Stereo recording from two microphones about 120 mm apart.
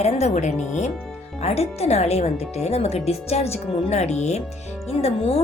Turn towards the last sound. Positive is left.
turn(degrees=55)  # may be behind; listen again after turning